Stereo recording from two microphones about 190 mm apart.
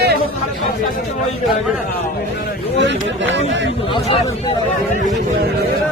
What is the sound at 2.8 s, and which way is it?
Speech, 70° right (ahead or behind).